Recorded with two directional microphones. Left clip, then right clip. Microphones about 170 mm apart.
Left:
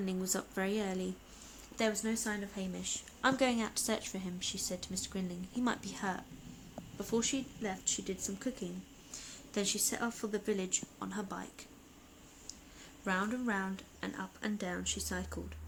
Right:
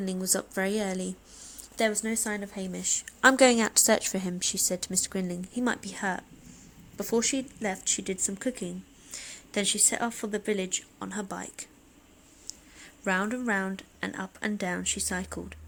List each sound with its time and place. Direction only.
0.0 s speech: 25° right (ahead or behind)
2.0 s a woman's voice: 30° right (ahead or behind)
6.9 s a woman's voice: 45° right (ahead or behind)